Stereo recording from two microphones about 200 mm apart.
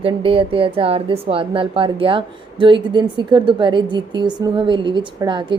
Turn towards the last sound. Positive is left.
turn(degrees=-25)  # may be behind; listen again after turning